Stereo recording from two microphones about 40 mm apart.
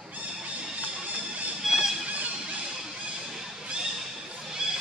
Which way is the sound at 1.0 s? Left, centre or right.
Right.